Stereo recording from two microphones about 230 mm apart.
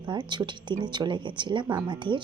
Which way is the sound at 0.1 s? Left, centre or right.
Centre.